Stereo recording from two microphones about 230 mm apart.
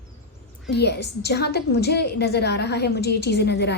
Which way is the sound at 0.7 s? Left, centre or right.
Left.